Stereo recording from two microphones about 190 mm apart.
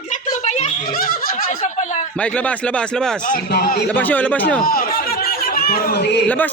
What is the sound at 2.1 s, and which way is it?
Speech, 5° left (ahead or behind).